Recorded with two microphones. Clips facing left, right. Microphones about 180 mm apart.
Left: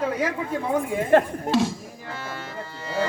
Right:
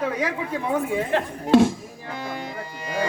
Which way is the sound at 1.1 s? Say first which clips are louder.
Left 9 dB; 50° left (ahead or behind).